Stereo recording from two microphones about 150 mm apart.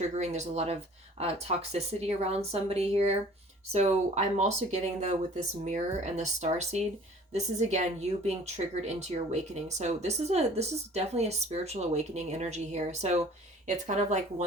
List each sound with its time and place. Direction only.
0.2 s speech: 50° right (ahead or behind)
8.3 s speech: 45° right (ahead or behind)